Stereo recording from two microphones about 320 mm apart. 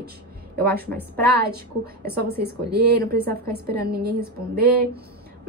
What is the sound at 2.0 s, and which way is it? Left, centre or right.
A woman's voice, right.